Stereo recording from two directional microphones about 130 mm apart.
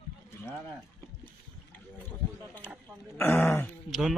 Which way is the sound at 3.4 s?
15° left (ahead or behind).